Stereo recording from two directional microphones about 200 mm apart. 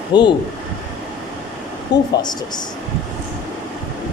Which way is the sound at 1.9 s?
60° left (ahead or behind).